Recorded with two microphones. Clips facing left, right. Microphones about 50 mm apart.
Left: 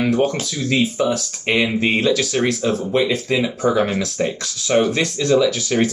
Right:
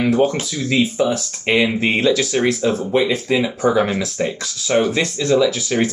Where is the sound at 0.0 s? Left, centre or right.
Centre.